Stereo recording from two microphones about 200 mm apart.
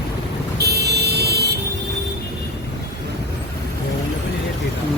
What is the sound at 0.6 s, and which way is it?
Vehicle, 55° right (ahead or behind).